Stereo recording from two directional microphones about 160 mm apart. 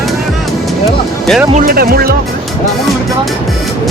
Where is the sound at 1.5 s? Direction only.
65° right (ahead or behind).